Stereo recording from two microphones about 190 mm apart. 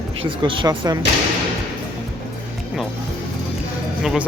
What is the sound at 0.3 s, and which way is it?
Speech, 25° right (ahead or behind).